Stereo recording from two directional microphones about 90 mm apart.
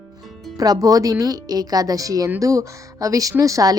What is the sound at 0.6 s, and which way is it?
A woman's voice, 45° right (ahead or behind).